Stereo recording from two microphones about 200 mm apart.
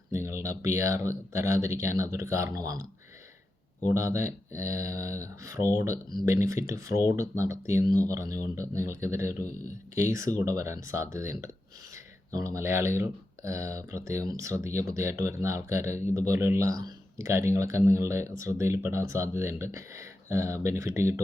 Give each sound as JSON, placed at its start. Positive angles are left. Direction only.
{"t": 0.1, "sound": "speech", "side_deg": -15}
{"t": 3.8, "sound": "speech", "side_deg": -15}